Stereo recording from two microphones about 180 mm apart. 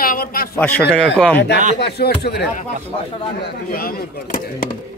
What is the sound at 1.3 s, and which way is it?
Speech, 70° left (ahead or behind).